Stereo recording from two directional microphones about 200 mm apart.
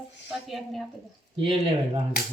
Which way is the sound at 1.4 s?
25° right (ahead or behind).